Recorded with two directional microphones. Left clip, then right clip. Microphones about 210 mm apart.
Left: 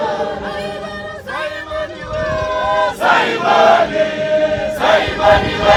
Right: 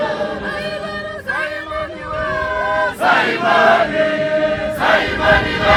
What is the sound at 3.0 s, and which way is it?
Choir, 50° left (ahead or behind).